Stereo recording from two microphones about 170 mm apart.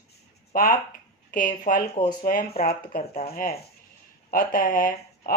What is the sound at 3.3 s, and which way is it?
Speech, 60° left (ahead or behind).